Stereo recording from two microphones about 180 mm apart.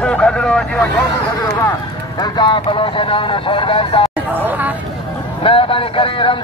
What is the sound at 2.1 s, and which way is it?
Speech, 25° left (ahead or behind).